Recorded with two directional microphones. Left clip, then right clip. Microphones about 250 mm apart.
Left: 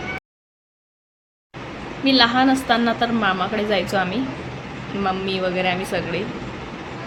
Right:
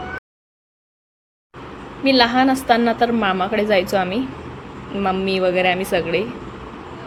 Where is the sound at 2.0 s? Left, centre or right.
Right.